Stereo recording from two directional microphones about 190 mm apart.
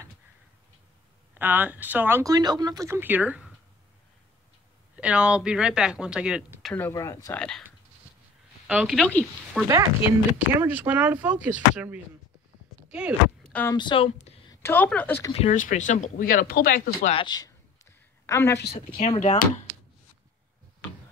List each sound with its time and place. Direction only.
1.3 s speech: 10° right (ahead or behind)
4.9 s speech: 5° right (ahead or behind)
6.7 s speech: 15° left (ahead or behind)
7.3 s speech: 5° left (ahead or behind)
8.6 s speech: centre (ahead or behind)
10.6 s speech: 10° right (ahead or behind)
13.5 s speech: 10° left (ahead or behind)
13.7 s speech: 25° left (ahead or behind)
14.5 s a woman's voice: 10° left (ahead or behind)
15.3 s speech: 40° left (ahead or behind)
17.1 s a woman's voice: 25° left (ahead or behind)
18.7 s speech: 35° left (ahead or behind)